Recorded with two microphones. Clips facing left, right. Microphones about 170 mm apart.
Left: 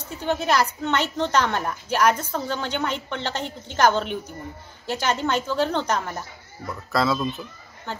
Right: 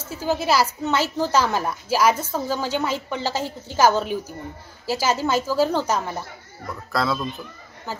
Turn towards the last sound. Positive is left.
turn(degrees=0)  # may be behind; listen again after turning